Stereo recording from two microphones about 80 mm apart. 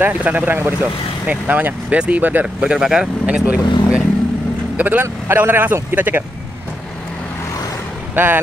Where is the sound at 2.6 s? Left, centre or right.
Centre.